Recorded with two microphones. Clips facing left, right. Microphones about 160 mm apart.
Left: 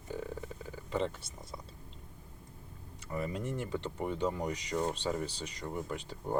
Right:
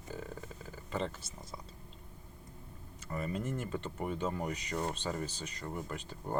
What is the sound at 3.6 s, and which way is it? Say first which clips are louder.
Speech: left 2 dB; 70° left (ahead or behind).